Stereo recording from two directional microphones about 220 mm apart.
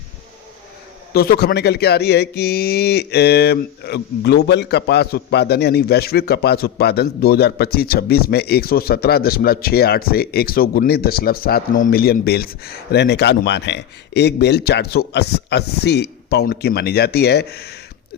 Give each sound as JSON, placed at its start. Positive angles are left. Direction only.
{"t": 1.1, "sound": "speech", "side_deg": 45}